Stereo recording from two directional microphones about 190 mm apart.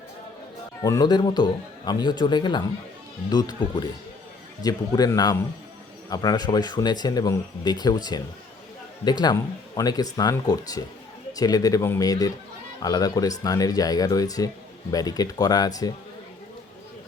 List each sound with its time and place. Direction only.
0.8 s speech: 20° left (ahead or behind)